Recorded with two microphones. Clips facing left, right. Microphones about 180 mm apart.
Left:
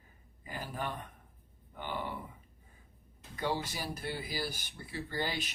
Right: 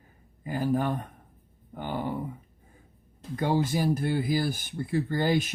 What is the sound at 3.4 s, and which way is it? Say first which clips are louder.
Speech: right 9 dB; 50° right (ahead or behind).